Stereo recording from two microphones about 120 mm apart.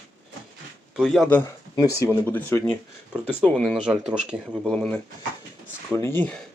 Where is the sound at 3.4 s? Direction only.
5° left (ahead or behind).